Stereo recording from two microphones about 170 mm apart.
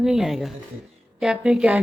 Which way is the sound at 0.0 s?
5° right (ahead or behind).